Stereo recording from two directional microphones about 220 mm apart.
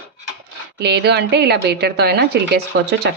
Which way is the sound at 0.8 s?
50° right (ahead or behind).